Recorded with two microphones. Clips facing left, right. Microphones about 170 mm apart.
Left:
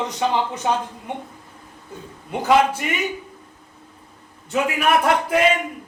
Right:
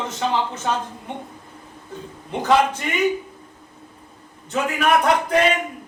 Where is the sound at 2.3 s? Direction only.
10° left (ahead or behind).